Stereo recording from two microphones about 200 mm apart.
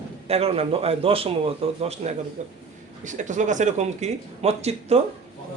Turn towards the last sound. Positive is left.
turn(degrees=-30)  # may be behind; listen again after turning